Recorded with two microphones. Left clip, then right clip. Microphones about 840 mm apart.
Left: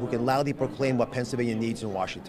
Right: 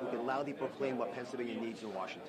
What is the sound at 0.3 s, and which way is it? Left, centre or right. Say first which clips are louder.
A man's voice: left 11 dB; left.